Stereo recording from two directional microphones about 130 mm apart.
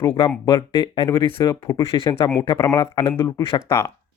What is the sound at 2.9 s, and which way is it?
Speech, 45° left (ahead or behind).